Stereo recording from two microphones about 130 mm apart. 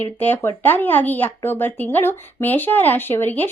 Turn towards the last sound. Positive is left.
turn(degrees=15)  # may be behind; listen again after turning